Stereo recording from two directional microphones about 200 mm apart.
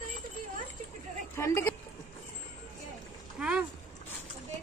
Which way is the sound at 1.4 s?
10° left (ahead or behind).